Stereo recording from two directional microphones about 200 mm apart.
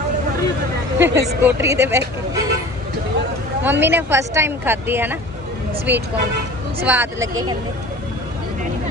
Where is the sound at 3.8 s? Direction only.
10° right (ahead or behind).